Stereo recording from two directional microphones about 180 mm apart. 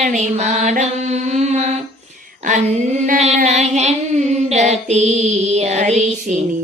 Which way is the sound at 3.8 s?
40° right (ahead or behind).